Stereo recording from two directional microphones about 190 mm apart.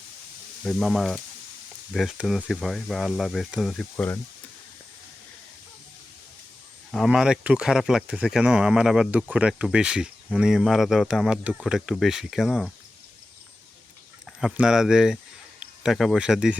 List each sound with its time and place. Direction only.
0.6 s speech: centre (ahead or behind)
6.9 s speech: centre (ahead or behind)
14.4 s speech: 5° right (ahead or behind)